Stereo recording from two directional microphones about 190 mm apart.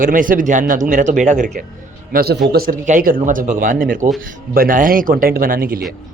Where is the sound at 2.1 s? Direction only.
55° right (ahead or behind).